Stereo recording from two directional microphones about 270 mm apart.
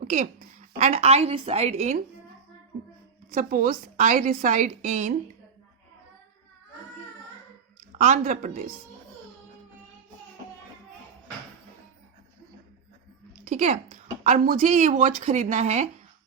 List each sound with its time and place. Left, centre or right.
0.1 s a woman's voice: right
3.3 s a woman's voice: right
8.0 s a woman's voice: right
13.5 s a woman's voice: right